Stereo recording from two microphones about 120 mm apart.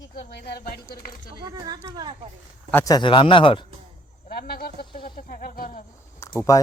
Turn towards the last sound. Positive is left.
turn(degrees=30)  # may be behind; listen again after turning